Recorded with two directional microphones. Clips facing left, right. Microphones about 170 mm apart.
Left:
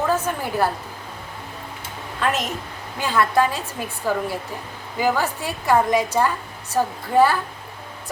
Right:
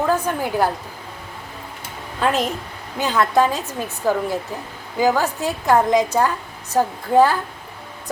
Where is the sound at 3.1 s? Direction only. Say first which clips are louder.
Right 1 dB; 20° right (ahead or behind).